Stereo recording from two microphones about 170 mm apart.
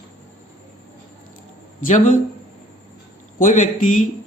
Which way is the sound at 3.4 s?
50° left (ahead or behind).